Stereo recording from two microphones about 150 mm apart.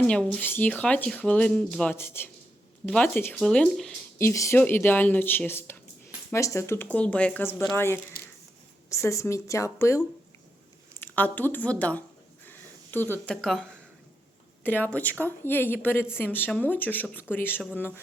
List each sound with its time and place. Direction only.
0.1 s speech: 5° left (ahead or behind)
4.2 s speech: 20° left (ahead or behind)
8.9 s speech: 20° left (ahead or behind)
11.0 s speech: 10° left (ahead or behind)